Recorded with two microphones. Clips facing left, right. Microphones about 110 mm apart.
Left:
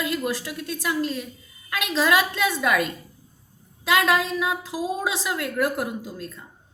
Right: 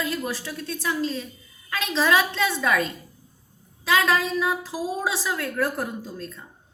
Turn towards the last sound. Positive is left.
turn(degrees=10)  # may be behind; listen again after turning